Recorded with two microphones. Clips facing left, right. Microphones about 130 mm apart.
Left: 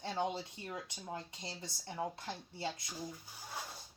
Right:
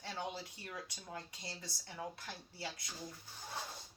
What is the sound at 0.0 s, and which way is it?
Speech, 20° left (ahead or behind).